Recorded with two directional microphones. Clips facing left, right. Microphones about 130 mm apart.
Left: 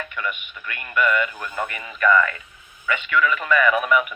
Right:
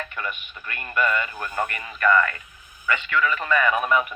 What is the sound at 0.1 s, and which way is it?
Speech, 35° right (ahead or behind).